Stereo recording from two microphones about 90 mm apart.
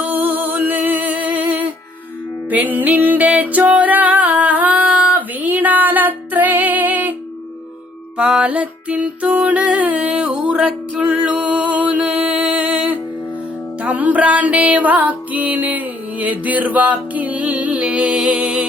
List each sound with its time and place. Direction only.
0.0 s music: 20° right (ahead or behind)
8.2 s music: 15° right (ahead or behind)